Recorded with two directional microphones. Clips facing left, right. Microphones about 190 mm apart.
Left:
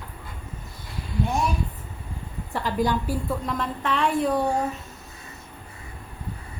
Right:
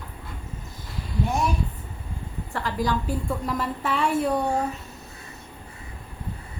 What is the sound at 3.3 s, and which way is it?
A woman's voice, 5° right (ahead or behind).